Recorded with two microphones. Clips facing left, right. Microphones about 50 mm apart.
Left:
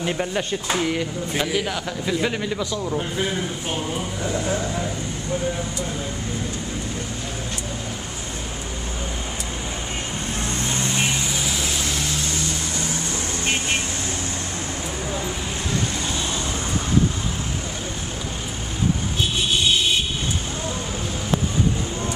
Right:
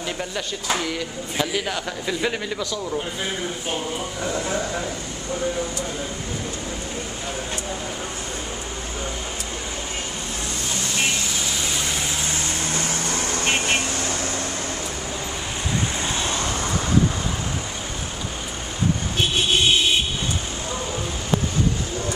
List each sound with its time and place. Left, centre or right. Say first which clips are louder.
0.0 s speech: left 4 dB; left
0.7 s speech: left 3 dB; centre
1.5 s a man's voice: left 1 dB; centre
11.8 s vehicle: even; centre